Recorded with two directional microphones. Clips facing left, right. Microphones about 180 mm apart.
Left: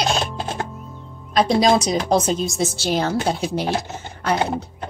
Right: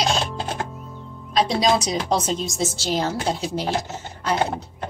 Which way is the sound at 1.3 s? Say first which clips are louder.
Left 3 dB; 50° left (ahead or behind).